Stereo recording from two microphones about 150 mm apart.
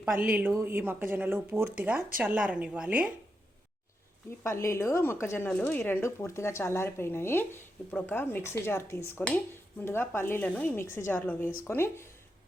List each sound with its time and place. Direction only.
0.0 s speech: 10° right (ahead or behind)
4.4 s speech: 20° left (ahead or behind)